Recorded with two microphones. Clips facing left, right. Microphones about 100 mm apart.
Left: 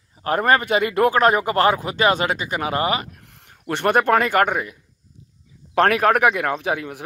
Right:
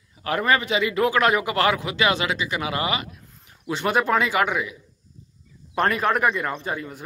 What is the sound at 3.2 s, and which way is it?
Speech, 80° left.